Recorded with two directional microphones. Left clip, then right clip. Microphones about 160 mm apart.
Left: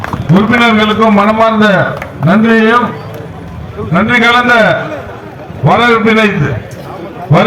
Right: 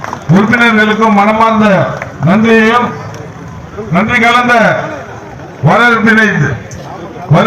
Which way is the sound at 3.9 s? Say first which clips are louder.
Even; 45° left (ahead or behind).